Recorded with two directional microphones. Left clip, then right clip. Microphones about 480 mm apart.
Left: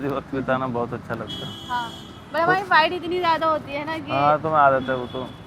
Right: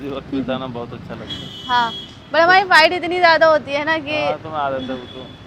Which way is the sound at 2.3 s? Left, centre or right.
Right.